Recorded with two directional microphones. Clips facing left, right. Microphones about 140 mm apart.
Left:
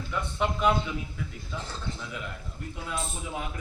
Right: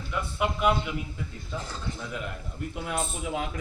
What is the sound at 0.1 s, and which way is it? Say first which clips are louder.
Speech: right 1 dB; 5° right (ahead or behind).